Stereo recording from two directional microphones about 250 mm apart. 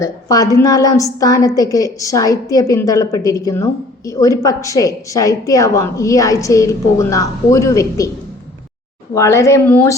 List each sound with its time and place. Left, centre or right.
0.0 s a woman's voice: centre
9.1 s a woman's voice: centre